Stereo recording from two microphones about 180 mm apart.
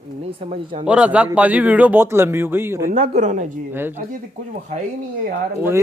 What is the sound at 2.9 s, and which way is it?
Speech, 35° right (ahead or behind).